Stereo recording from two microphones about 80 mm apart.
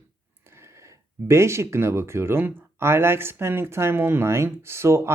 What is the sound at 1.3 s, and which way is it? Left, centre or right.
Speech, right.